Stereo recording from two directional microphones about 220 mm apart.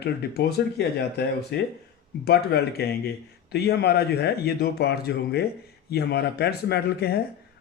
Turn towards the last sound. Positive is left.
turn(degrees=45)  # may be behind; listen again after turning